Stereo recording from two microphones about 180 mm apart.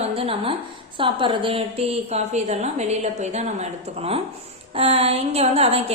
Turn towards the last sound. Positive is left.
turn(degrees=-35)  # may be behind; listen again after turning